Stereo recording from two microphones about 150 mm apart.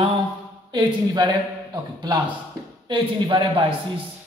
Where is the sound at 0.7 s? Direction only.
30° right (ahead or behind).